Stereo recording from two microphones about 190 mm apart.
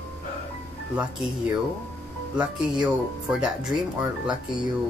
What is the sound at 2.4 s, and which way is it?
A woman's voice, 5° right (ahead or behind).